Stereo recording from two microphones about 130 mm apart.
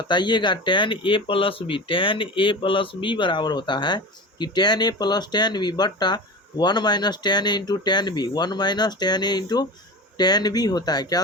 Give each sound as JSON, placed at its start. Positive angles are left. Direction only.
{"t": 0.0, "sound": "speech", "side_deg": 35}